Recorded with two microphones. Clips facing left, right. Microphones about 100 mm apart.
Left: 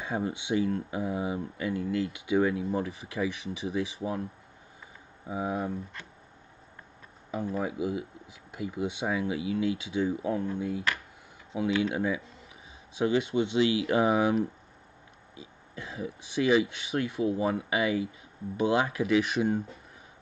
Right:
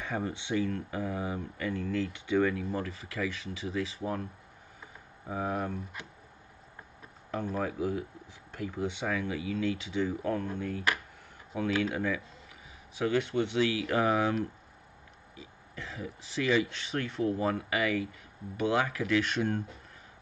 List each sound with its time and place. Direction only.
0.0 s speech: 15° left (ahead or behind)
5.3 s speech: 10° left (ahead or behind)
7.2 s speech: 10° left (ahead or behind)
11.8 s speech: 15° left (ahead or behind)